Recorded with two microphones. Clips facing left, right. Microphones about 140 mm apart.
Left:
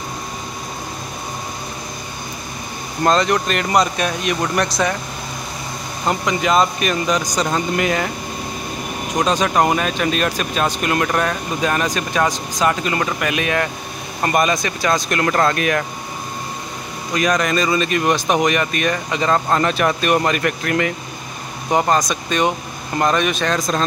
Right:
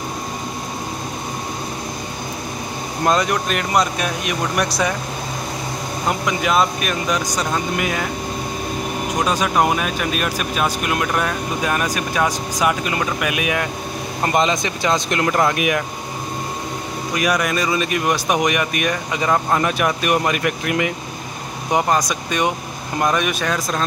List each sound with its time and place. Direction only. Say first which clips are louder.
3.0 s speech: left 2 dB; 10° right (ahead or behind)
6.0 s speech: left 2 dB; 5° right (ahead or behind)
9.2 s speech: left 2 dB; 5° right (ahead or behind)
14.2 s speech: left 1 dB; 20° right (ahead or behind)
17.1 s speech: left 2 dB; 10° right (ahead or behind)